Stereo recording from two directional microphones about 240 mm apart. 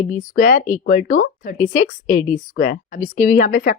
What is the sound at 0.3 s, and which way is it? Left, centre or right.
Speech, left.